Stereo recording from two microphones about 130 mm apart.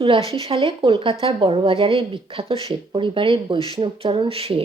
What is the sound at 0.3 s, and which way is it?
A woman's voice, 45° right (ahead or behind).